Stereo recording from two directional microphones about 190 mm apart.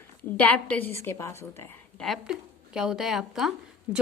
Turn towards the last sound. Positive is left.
turn(degrees=-10)  # may be behind; listen again after turning